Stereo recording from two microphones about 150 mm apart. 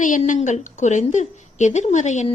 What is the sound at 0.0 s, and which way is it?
A woman's voice, 60° left (ahead or behind).